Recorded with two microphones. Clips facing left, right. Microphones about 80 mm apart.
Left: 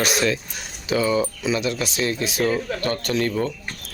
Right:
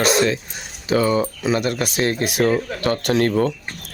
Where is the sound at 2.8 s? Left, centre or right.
Right.